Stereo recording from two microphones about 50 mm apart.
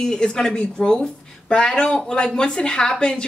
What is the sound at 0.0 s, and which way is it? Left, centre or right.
A woman's voice, centre.